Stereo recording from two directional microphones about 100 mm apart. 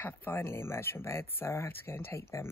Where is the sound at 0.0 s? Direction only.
20° left (ahead or behind).